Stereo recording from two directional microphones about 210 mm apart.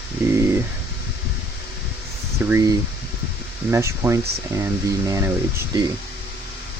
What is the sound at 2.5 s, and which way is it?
Speech, 15° right (ahead or behind).